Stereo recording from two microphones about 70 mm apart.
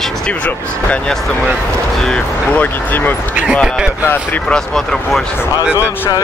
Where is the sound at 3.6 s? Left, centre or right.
Centre.